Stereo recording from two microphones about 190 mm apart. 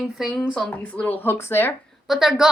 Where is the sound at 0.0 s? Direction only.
Centre (ahead or behind).